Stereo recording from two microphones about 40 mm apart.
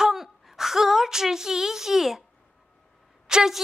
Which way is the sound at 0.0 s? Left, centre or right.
Centre.